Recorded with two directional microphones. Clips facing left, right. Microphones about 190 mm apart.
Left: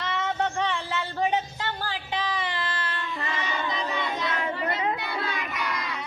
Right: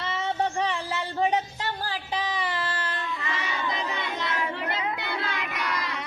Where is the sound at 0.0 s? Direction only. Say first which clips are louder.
Even; 30° right (ahead or behind).